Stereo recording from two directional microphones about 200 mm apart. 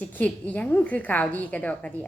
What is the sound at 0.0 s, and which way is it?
A woman's voice, 5° left (ahead or behind).